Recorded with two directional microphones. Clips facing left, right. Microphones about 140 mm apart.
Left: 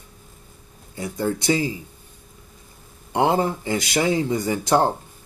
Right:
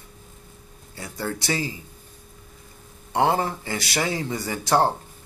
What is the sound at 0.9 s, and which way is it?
Speech, 20° left (ahead or behind).